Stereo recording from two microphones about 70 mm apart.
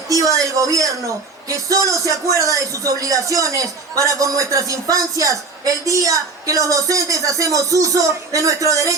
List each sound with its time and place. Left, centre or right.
0.1 s a woman's voice: right